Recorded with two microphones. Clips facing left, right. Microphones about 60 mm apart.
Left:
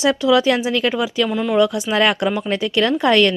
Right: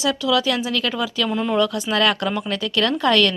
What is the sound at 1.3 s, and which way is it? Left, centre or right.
Speech, centre.